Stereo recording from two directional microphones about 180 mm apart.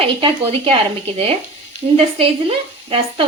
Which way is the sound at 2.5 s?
30° right (ahead or behind).